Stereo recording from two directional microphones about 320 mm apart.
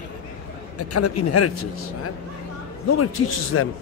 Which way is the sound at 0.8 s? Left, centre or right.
Left.